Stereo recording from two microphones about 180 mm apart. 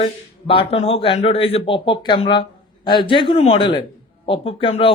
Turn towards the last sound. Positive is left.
turn(degrees=30)  # may be behind; listen again after turning